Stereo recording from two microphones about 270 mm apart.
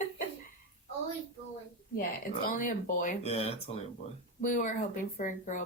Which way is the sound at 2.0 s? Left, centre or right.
Left.